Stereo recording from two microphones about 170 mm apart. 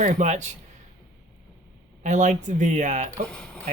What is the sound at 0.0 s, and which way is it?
Speech, 45° right (ahead or behind).